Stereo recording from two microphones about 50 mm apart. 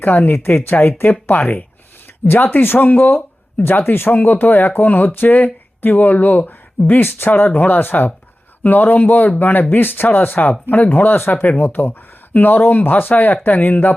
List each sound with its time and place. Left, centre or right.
0.0 s speech: left
1.3 s speech: left